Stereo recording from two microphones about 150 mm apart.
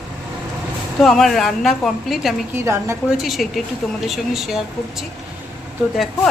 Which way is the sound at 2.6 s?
20° right (ahead or behind).